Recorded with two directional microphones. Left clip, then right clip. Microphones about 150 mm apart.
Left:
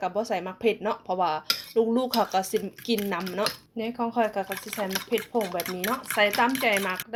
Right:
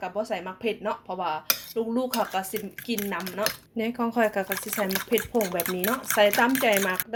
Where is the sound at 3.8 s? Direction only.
20° right (ahead or behind).